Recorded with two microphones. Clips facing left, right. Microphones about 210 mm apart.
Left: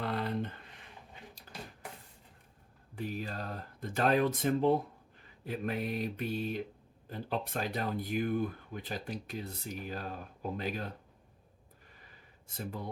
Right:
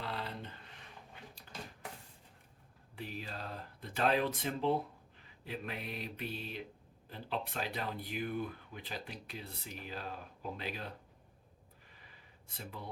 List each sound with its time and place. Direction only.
0.0 s a sound: 50° left (ahead or behind)
2.9 s speech: 45° left (ahead or behind)
12.5 s speech: 45° left (ahead or behind)